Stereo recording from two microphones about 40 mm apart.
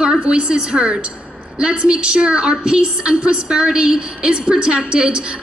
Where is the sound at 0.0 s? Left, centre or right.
Right.